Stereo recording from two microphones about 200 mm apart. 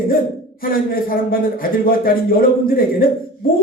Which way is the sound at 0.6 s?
45° left (ahead or behind).